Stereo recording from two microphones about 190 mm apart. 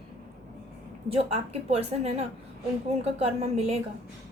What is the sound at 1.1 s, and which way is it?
A woman's voice, 30° right (ahead or behind).